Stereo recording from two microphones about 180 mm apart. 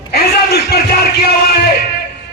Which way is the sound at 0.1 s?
60° left (ahead or behind).